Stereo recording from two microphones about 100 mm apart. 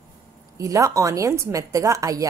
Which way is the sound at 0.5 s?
35° right (ahead or behind).